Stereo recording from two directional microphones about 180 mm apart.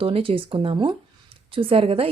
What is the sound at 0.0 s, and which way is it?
Speech, 30° right (ahead or behind).